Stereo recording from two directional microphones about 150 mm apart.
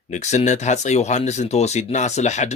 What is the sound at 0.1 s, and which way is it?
Speech, 50° left (ahead or behind).